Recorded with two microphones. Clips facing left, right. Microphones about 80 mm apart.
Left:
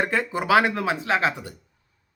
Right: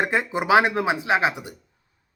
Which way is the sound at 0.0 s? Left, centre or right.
Centre.